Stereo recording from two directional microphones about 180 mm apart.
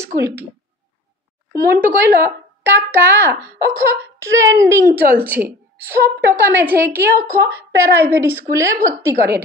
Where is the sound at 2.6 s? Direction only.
10° right (ahead or behind).